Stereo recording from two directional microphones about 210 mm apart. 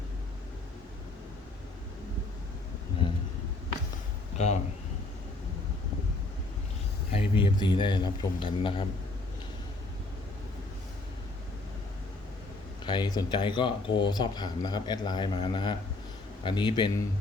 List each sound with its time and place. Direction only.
4.4 s speech: 35° left (ahead or behind)
7.1 s speech: 25° left (ahead or behind)
12.8 s speech: 20° left (ahead or behind)